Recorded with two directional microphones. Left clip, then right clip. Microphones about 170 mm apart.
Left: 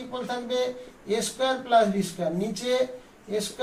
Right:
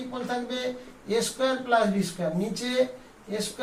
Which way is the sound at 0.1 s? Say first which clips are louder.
Left 2 dB; 10° right (ahead or behind).